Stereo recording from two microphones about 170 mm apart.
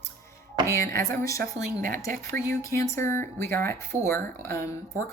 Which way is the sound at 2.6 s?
15° left (ahead or behind).